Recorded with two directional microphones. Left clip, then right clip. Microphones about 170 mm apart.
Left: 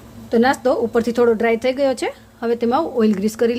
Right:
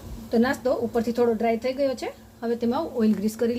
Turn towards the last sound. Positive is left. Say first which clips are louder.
# left 7 dB
turn(degrees=20)  # may be behind; listen again after turning